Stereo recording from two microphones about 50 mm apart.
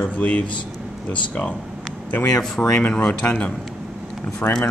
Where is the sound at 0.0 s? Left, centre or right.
Left.